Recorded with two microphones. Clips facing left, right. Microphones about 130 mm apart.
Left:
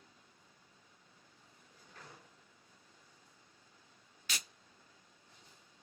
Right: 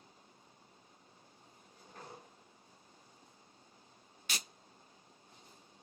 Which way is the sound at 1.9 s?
35° right (ahead or behind).